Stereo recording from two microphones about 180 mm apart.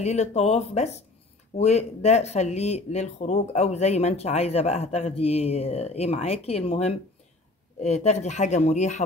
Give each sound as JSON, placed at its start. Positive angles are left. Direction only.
{"t": 0.0, "sound": "speech", "side_deg": 40}